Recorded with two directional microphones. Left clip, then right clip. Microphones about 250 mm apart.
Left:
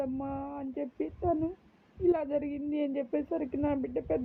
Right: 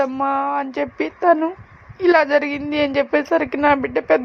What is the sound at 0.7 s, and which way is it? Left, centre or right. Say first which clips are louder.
Speech: right 13 dB; right.